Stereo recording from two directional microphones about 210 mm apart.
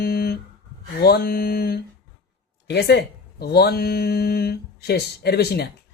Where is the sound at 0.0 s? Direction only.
45° left (ahead or behind).